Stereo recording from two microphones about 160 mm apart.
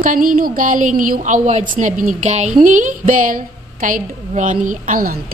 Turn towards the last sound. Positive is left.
turn(degrees=-55)  # may be behind; listen again after turning